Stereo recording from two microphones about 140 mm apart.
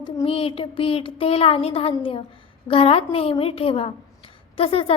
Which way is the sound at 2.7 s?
45° left (ahead or behind).